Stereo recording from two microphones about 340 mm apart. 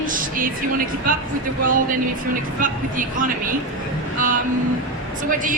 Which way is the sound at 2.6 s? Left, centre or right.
Right.